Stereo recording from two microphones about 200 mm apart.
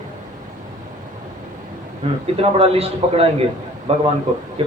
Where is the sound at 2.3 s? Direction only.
30° right (ahead or behind).